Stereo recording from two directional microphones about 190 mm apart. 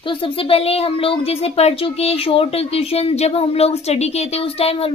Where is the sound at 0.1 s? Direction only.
30° left (ahead or behind).